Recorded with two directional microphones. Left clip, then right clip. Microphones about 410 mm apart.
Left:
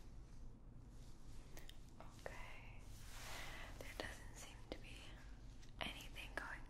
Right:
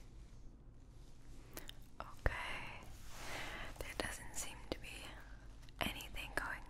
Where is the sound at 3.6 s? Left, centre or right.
Right.